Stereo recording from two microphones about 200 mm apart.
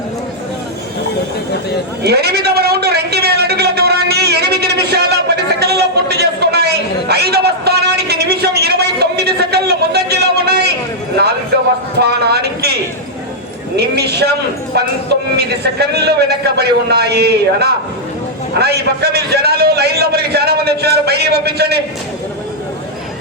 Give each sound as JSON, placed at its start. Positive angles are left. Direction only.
{"t": 2.0, "sound": "a sound", "side_deg": -55}
{"t": 12.1, "sound": "a man's voice", "side_deg": -55}
{"t": 13.7, "sound": "a man's voice", "side_deg": -55}